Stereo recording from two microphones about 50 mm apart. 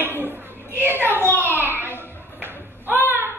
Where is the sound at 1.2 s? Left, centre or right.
Left.